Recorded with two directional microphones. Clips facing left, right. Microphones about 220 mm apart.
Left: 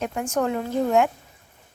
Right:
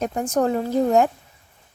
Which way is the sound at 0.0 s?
35° right (ahead or behind).